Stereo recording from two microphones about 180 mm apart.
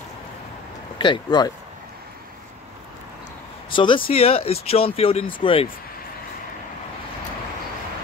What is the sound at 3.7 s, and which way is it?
Speech, 30° left (ahead or behind).